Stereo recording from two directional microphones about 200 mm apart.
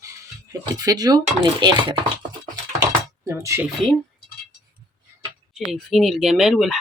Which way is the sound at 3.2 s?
15° right (ahead or behind).